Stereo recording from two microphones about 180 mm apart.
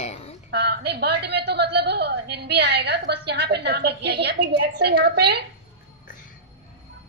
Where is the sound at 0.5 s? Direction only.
65° right (ahead or behind).